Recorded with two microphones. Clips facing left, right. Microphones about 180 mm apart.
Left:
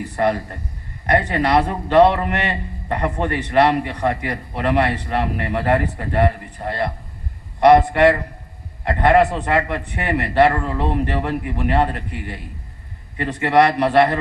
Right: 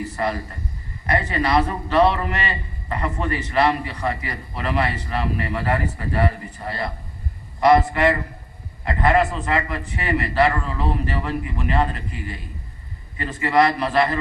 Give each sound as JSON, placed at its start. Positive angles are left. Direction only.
{"t": 0.0, "sound": "a man's voice", "side_deg": 65}